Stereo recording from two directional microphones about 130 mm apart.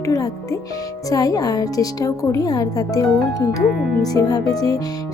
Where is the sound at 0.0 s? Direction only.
25° left (ahead or behind).